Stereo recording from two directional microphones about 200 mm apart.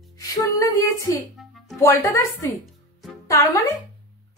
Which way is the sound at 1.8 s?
15° left (ahead or behind).